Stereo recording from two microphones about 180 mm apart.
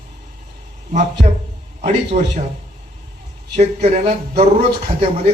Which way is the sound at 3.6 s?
35° right (ahead or behind).